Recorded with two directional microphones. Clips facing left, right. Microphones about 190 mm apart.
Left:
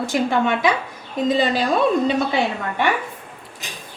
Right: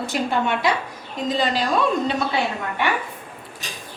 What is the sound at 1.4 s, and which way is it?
Speech, 55° left (ahead or behind).